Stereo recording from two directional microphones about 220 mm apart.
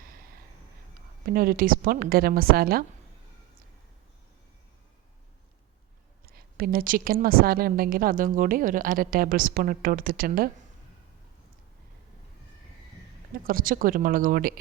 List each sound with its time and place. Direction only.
1.2 s a woman's voice: 40° right (ahead or behind)
6.3 s a woman's voice: 40° right (ahead or behind)
13.5 s a woman's voice: 40° right (ahead or behind)